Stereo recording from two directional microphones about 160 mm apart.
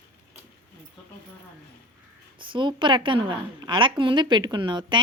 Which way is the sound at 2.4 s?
30° right (ahead or behind).